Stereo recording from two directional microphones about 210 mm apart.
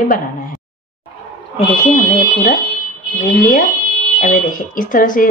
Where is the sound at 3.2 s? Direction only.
40° left (ahead or behind).